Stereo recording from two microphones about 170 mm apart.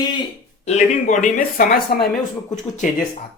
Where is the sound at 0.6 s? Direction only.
45° left (ahead or behind); by 2.1 s 65° left (ahead or behind).